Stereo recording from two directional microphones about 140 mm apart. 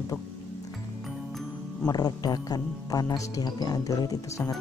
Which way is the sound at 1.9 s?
30° left (ahead or behind).